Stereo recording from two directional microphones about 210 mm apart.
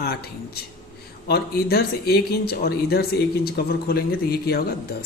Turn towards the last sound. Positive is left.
turn(degrees=45)  # may be behind; listen again after turning